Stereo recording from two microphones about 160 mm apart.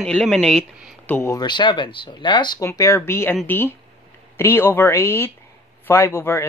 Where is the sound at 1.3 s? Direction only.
25° left (ahead or behind).